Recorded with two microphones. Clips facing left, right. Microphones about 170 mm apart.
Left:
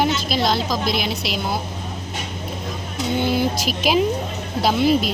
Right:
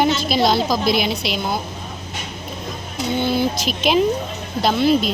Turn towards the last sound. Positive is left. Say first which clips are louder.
# right 1 dB
turn(degrees=10)  # may be behind; listen again after turning